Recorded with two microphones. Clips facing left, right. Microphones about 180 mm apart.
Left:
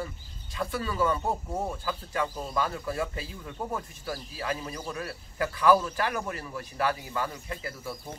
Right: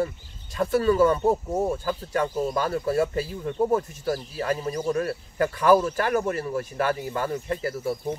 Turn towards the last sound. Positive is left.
turn(degrees=-45)  # may be behind; listen again after turning